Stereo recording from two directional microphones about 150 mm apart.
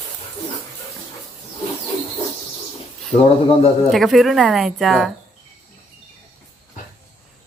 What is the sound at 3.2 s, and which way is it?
Speech, 40° left (ahead or behind).